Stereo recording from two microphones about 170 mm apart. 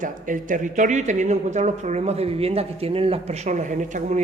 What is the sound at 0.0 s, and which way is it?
Speech, 50° right (ahead or behind).